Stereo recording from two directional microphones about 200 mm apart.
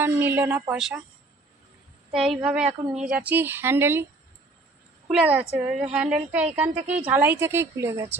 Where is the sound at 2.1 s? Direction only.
5° right (ahead or behind).